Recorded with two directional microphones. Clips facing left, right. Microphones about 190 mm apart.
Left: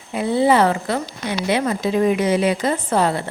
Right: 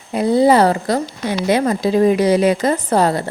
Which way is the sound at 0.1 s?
40° right (ahead or behind).